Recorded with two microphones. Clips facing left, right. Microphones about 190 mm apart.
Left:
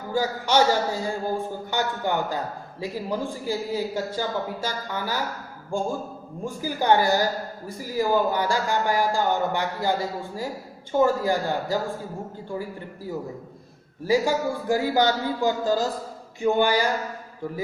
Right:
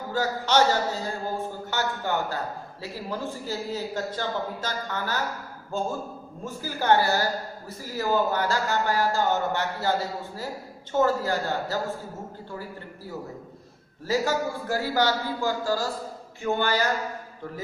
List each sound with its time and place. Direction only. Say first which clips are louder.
0.1 s a man's voice: left 2 dB; 10° left (ahead or behind)
10.9 s a man's voice: left 2 dB; 15° left (ahead or behind)
14.1 s a man's voice: left 3 dB; 15° left (ahead or behind)